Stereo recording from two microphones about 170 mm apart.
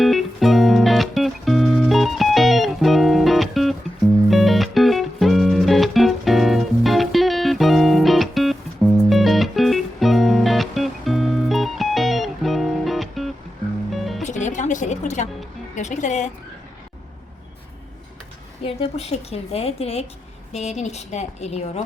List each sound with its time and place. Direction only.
0.0 s music: centre (ahead or behind)
14.2 s music: 45° left (ahead or behind)
18.6 s a woman's voice: 35° left (ahead or behind)